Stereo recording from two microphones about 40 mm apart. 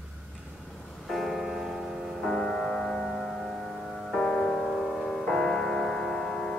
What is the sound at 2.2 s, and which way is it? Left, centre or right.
Music, centre.